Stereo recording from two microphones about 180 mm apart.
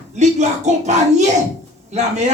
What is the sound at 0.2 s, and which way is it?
Speech, 40° right (ahead or behind).